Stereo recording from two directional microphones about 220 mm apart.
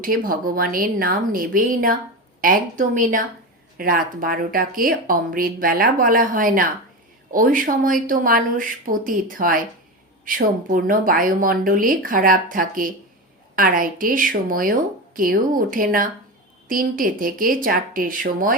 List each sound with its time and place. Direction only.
0.0 s speech: 40° right (ahead or behind)